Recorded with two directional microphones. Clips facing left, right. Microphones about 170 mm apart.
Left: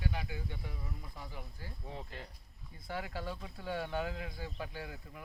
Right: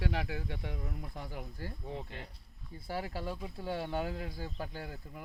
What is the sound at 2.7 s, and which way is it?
Speech, 30° right (ahead or behind).